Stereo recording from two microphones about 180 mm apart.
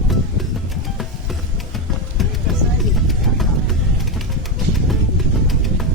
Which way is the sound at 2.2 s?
Centre (ahead or behind).